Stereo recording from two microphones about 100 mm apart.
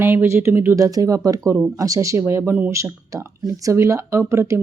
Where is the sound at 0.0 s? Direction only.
20° right (ahead or behind).